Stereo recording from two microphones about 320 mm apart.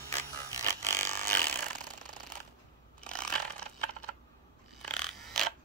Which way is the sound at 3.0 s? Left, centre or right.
Centre.